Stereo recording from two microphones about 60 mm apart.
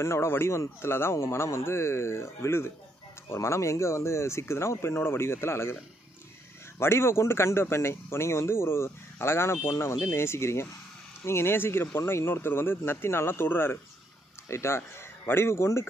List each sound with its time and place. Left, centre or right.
0.0 s a man's voice: left
6.8 s a man's voice: left